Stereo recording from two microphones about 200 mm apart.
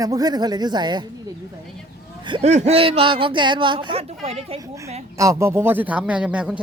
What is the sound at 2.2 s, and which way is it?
Speech, 30° right (ahead or behind).